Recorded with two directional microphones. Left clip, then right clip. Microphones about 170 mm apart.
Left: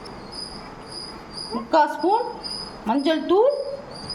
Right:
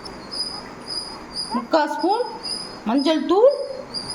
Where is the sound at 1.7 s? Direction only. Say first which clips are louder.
Left 1 dB; 10° right (ahead or behind).